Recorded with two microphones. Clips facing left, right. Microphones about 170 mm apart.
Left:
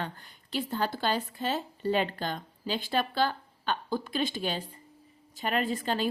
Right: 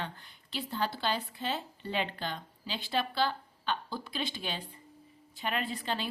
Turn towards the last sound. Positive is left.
turn(degrees=45)  # may be behind; listen again after turning